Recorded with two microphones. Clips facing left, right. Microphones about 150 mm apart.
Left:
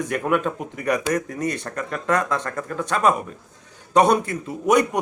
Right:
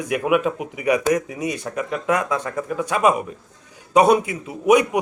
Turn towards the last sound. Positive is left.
turn(degrees=-5)  # may be behind; listen again after turning